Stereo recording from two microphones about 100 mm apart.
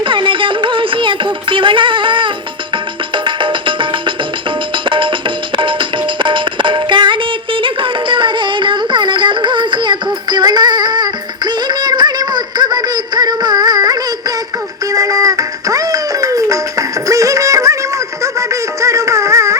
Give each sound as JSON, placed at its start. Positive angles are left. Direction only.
{"t": 0.0, "sound": "music", "side_deg": -55}
{"t": 6.1, "sound": "music", "side_deg": -55}